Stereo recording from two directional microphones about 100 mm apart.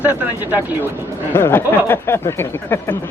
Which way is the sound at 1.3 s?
20° left (ahead or behind).